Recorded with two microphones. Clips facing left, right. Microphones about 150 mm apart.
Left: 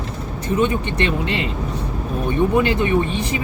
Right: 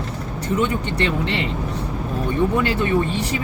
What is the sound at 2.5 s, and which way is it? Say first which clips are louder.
Speech: left 2 dB; 20° left (ahead or behind).